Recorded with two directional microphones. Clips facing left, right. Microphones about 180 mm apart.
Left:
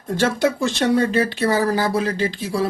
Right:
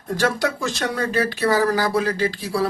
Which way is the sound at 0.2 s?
25° left (ahead or behind).